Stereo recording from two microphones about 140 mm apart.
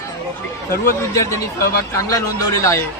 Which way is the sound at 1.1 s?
20° left (ahead or behind).